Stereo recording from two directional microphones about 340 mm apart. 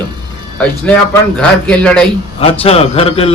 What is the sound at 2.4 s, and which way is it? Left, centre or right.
Speech, centre.